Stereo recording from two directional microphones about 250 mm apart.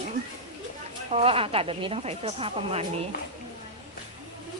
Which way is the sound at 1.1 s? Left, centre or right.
Right.